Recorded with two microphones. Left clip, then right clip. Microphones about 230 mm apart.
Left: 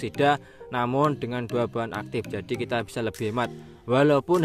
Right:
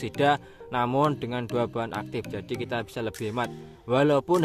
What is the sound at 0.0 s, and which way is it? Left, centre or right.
Speech, centre.